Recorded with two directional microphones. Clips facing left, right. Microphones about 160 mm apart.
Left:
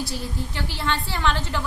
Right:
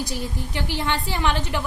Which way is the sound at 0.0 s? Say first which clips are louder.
Right 1 dB; 15° right (ahead or behind).